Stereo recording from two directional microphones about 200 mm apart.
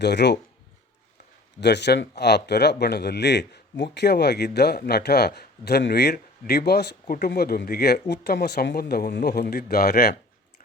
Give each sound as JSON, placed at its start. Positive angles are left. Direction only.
{"t": 0.0, "sound": "speech", "side_deg": 60}
{"t": 1.6, "sound": "speech", "side_deg": 60}